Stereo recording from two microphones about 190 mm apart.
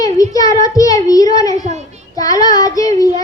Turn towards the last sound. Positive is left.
turn(degrees=20)  # may be behind; listen again after turning